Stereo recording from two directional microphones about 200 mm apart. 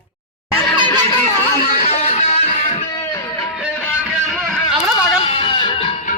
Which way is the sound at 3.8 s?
Centre (ahead or behind).